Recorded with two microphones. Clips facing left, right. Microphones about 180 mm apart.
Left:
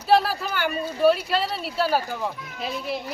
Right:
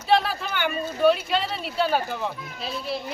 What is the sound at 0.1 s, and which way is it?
Speech, 5° left (ahead or behind).